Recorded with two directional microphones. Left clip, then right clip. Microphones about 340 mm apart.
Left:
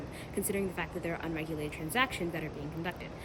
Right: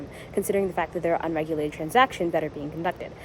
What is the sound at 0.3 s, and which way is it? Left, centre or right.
A woman's voice, centre.